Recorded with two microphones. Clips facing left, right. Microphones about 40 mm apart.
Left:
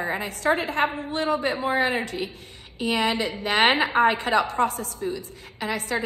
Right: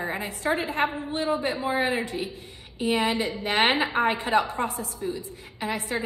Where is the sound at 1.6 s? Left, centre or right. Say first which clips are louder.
Left 2 dB; left.